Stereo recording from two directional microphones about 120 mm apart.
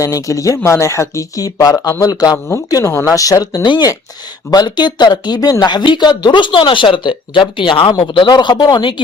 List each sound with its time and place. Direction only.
0.0 s speech: 25° left (ahead or behind)